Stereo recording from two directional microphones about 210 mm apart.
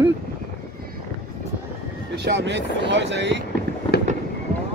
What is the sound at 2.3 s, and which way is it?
Speech, 60° right (ahead or behind).